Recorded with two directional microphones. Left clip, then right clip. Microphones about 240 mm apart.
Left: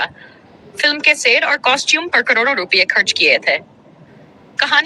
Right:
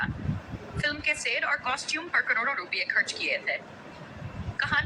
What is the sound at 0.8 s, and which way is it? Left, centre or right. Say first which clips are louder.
A woman's voice: left 15 dB; left.